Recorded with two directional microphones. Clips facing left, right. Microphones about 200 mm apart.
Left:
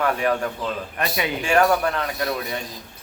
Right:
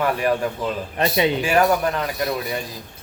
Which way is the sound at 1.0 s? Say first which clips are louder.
Right 8 dB; 25° right (ahead or behind).